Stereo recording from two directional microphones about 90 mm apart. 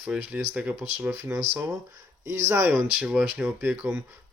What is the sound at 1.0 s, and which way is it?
Speech, 25° right (ahead or behind).